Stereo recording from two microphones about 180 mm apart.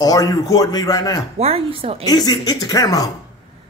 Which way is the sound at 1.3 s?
35° right (ahead or behind).